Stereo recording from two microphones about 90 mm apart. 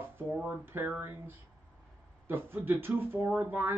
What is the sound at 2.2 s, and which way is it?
Speech, 25° right (ahead or behind).